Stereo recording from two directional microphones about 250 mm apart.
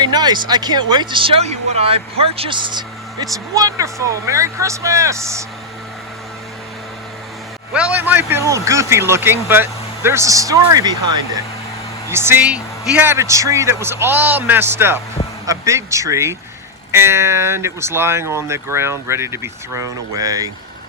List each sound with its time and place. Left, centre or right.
0.0 s speech: centre
7.7 s speech: centre